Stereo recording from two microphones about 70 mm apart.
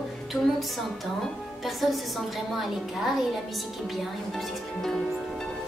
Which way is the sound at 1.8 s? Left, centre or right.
Centre.